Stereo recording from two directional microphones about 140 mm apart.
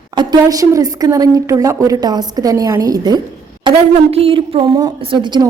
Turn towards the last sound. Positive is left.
turn(degrees=-30)  # may be behind; listen again after turning